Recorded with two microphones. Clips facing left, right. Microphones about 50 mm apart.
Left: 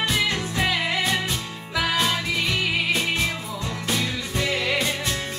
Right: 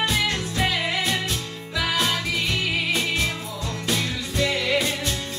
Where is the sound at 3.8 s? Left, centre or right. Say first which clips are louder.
Even; centre.